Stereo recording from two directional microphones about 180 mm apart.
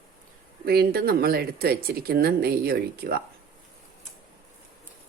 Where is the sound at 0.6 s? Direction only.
60° right (ahead or behind).